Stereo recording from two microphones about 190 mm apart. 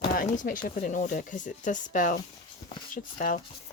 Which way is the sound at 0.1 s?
45° left (ahead or behind).